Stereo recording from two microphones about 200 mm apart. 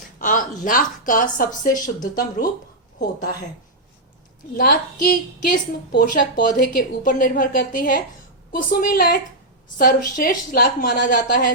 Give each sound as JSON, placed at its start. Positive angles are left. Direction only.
{"t": 0.2, "sound": "a woman's voice", "side_deg": 40}
{"t": 4.5, "sound": "a woman's voice", "side_deg": 50}